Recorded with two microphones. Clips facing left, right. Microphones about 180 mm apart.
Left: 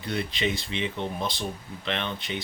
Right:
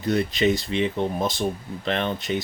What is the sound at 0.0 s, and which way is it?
Speech, 40° right (ahead or behind).